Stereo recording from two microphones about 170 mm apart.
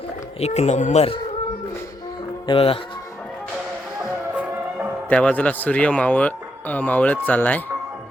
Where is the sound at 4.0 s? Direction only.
10° right (ahead or behind).